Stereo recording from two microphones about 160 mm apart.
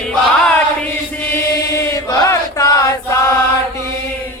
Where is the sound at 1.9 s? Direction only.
20° left (ahead or behind).